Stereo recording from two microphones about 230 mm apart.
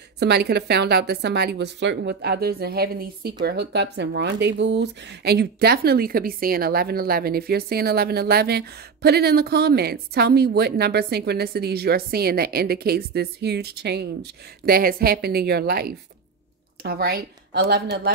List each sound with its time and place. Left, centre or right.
0.2 s speech: right